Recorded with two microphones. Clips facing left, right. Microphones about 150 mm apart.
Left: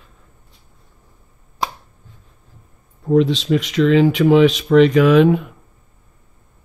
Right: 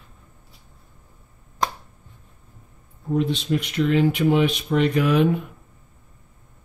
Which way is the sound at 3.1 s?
90° left.